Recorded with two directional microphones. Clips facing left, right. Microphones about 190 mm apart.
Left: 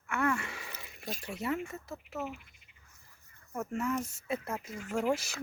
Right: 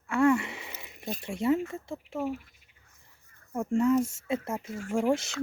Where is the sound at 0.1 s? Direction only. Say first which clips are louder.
Right 8 dB; 25° right (ahead or behind).